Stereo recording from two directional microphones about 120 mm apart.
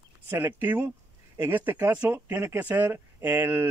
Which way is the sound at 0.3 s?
20° right (ahead or behind).